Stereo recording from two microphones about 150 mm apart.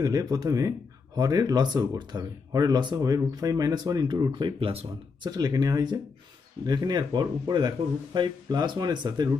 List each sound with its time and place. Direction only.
0.0 s speech: 25° right (ahead or behind)
5.3 s speech: 25° right (ahead or behind)